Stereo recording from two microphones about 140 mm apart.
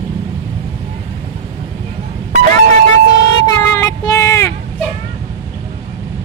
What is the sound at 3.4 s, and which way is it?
Child singing, 25° left (ahead or behind).